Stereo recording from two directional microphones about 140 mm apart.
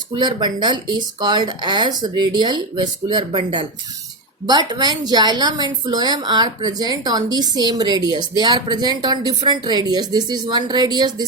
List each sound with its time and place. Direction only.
0.2 s a woman's voice: 30° right (ahead or behind)